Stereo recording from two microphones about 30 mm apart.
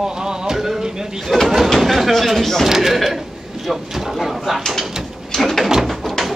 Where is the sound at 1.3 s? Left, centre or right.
Centre.